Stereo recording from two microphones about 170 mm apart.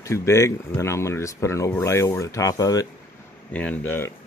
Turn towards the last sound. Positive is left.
turn(degrees=15)  # may be behind; listen again after turning